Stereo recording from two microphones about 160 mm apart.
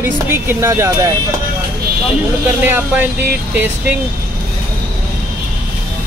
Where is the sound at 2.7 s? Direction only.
10° right (ahead or behind).